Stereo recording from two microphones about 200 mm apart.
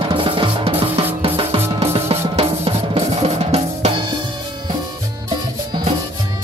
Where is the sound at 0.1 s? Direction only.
25° right (ahead or behind).